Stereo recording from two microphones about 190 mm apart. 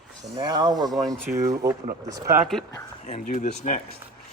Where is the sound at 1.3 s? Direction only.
15° right (ahead or behind).